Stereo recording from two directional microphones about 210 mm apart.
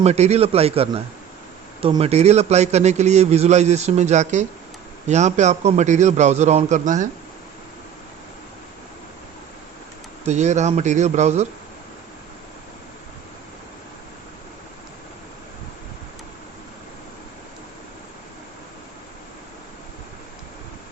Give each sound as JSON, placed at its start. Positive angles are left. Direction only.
{"t": 0.0, "sound": "a man's voice", "side_deg": -30}
{"t": 10.2, "sound": "a man's voice", "side_deg": -35}